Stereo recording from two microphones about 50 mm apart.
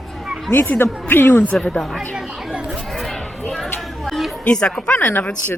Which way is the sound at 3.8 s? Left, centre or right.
Centre.